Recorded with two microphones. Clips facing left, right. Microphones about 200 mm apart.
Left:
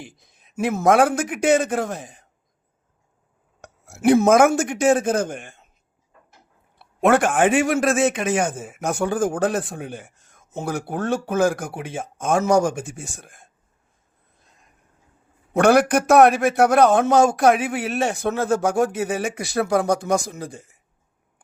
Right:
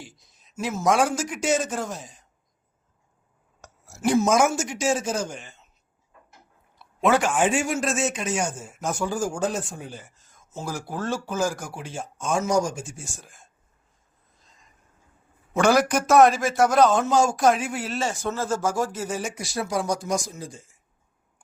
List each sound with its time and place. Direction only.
0.0 s a man's voice: 55° left (ahead or behind)
3.6 s speech: 60° left (ahead or behind)
6.7 s a man's voice: 55° left (ahead or behind)
14.3 s vehicle: 60° left (ahead or behind)
15.5 s a man's voice: 60° left (ahead or behind)